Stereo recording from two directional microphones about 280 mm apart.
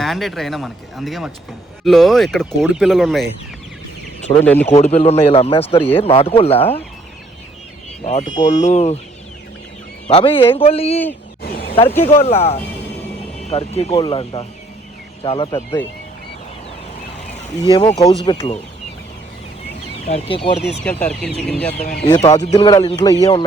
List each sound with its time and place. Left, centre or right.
0.0 s speech: centre
4.7 s speech: left
8.0 s speech: left
10.1 s speech: centre
12.0 s speech: left
17.6 s speech: centre
20.1 s speech: left
20.8 s speech: centre
22.1 s speech: centre